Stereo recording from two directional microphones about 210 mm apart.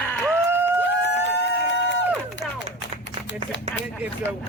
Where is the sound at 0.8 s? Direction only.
60° left (ahead or behind).